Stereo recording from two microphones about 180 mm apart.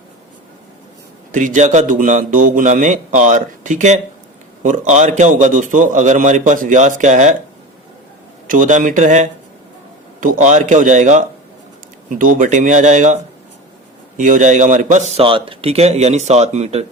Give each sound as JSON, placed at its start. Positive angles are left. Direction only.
{"t": 1.3, "sound": "a man's voice", "side_deg": -45}
{"t": 8.4, "sound": "a man's voice", "side_deg": -45}
{"t": 14.2, "sound": "a man's voice", "side_deg": -45}